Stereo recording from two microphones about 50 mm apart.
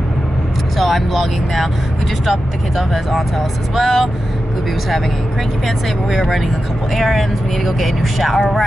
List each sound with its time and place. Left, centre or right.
0.7 s speech: centre
2.9 s speech: centre
6.0 s speech: centre